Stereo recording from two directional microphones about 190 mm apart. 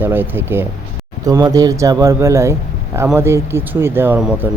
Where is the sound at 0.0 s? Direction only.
10° right (ahead or behind).